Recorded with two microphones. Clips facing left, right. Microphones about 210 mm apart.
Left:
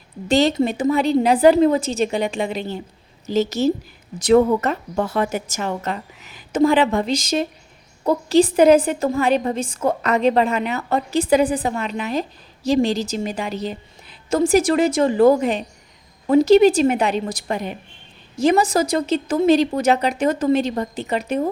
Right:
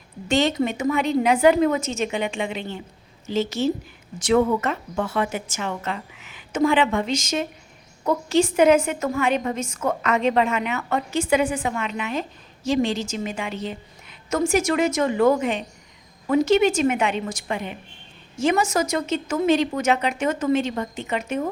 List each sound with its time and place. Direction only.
0.3 s a woman's voice: 35° left (ahead or behind)